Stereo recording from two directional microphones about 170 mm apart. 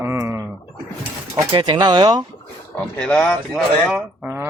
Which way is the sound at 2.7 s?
5° left (ahead or behind).